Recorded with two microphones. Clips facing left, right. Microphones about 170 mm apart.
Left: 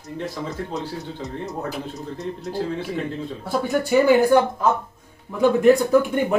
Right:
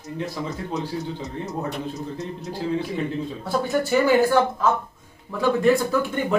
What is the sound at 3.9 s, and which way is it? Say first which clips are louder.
Speech: left 4 dB; 15° left (ahead or behind).